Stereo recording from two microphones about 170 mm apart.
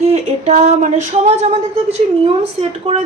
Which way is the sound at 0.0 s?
40° right (ahead or behind).